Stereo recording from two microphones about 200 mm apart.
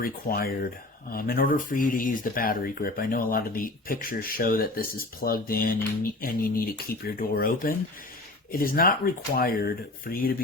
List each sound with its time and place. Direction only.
0.0 s speech: 45° left (ahead or behind)